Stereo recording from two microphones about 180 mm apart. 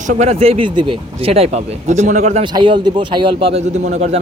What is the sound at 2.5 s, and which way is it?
A man's voice, 25° right (ahead or behind).